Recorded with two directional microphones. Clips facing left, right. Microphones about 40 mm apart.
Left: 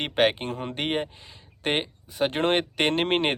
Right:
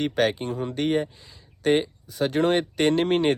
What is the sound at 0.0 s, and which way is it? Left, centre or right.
Speech, left.